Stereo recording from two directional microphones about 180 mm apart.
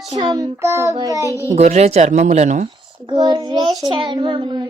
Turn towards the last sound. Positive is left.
turn(degrees=-25)  # may be behind; listen again after turning